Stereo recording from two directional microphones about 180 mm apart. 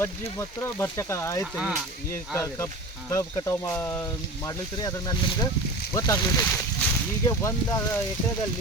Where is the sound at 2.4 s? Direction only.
15° left (ahead or behind).